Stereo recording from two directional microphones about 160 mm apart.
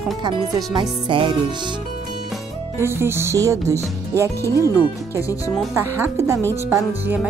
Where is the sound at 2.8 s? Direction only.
15° right (ahead or behind).